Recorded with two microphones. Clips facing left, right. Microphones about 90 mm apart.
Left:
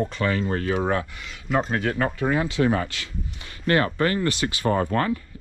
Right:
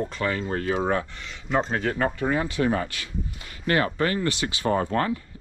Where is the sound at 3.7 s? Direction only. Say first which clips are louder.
Left 2 dB; 40° left (ahead or behind).